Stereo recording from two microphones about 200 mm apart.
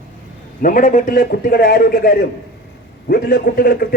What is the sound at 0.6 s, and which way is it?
A man's voice, 45° left (ahead or behind).